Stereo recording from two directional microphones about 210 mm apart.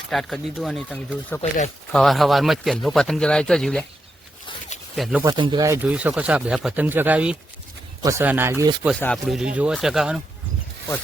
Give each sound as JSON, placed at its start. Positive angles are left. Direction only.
{"t": 0.1, "sound": "speech", "side_deg": 0}
{"t": 1.4, "sound": "speech", "side_deg": 35}
{"t": 1.9, "sound": "speech", "side_deg": 0}
{"t": 4.9, "sound": "speech", "side_deg": 0}
{"t": 5.2, "sound": "speech", "side_deg": -20}
{"t": 9.0, "sound": "speech", "side_deg": 5}